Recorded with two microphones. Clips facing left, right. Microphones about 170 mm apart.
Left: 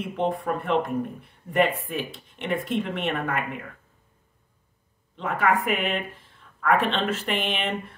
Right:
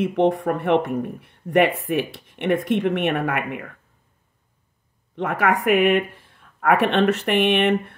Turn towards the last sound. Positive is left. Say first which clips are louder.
# right 10 dB
turn(degrees=-65)  # may be behind; listen again after turning